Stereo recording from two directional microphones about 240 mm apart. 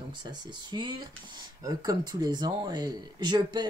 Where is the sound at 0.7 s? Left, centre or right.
Centre.